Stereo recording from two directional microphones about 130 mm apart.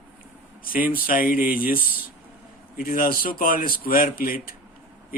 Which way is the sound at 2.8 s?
90° left.